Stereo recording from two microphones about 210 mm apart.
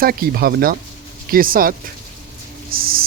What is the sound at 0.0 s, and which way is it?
Speech, 45° right (ahead or behind).